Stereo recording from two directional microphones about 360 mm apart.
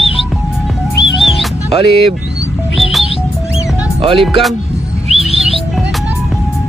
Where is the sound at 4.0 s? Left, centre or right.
Centre.